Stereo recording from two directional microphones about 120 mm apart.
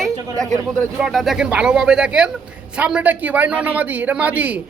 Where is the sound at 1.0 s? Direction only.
Centre (ahead or behind).